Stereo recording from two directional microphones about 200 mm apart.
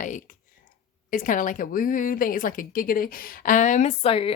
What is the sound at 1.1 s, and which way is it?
A woman's voice, 40° left (ahead or behind).